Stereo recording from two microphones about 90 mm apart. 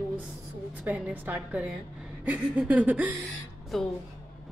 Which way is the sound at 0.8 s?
15° right (ahead or behind).